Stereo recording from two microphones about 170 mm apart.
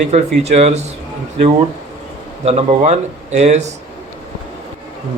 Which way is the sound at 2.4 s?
35° right (ahead or behind).